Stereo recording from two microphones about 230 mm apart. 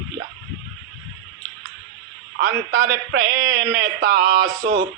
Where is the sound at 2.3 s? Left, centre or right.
Right.